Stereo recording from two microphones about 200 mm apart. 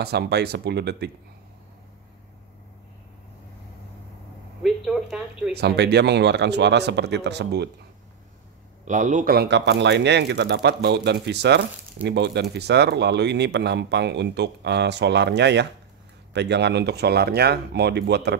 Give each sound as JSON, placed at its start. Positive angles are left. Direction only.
{"t": 0.0, "sound": "speech", "side_deg": -55}
{"t": 4.6, "sound": "a woman's voice", "side_deg": 0}
{"t": 5.5, "sound": "a man's voice", "side_deg": -55}
{"t": 8.8, "sound": "a man's voice", "side_deg": -40}